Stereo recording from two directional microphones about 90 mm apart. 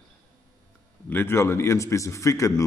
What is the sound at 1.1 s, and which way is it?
A man's voice, 25° left (ahead or behind).